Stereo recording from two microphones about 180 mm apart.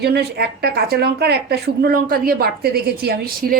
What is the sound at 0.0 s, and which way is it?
A woman's voice, 65° right (ahead or behind).